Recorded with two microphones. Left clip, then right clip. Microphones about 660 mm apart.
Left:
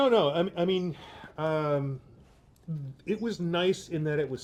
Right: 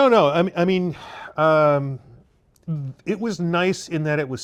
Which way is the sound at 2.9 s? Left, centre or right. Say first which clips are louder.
Right 6 dB; right.